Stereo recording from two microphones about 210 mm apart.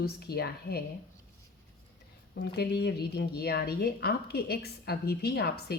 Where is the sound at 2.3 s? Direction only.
50° left (ahead or behind).